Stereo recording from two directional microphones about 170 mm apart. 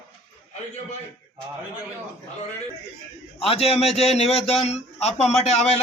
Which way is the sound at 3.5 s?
35° left (ahead or behind).